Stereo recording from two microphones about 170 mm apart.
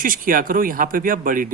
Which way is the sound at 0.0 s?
55° right (ahead or behind).